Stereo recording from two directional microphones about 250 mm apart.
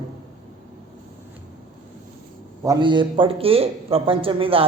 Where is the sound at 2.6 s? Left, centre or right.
Centre.